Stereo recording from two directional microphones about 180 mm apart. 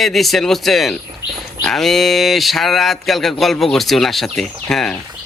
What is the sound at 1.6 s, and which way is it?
Speech, centre (ahead or behind).